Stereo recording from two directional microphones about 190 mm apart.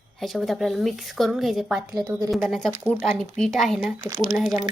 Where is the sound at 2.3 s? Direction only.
Centre (ahead or behind).